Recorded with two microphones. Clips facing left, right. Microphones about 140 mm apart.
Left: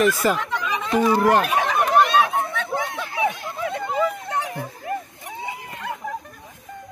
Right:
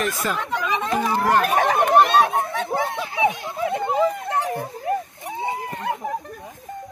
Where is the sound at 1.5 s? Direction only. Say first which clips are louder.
Right 2 dB; 50° right (ahead or behind).